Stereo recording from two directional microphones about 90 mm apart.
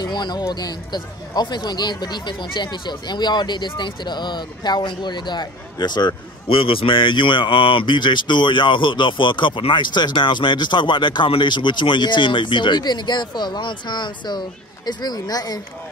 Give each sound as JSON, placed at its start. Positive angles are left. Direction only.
{"t": 0.0, "sound": "speech", "side_deg": 55}
{"t": 6.6, "sound": "speech", "side_deg": 85}